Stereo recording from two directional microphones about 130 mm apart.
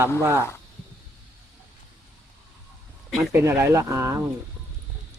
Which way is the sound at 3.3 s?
15° right (ahead or behind).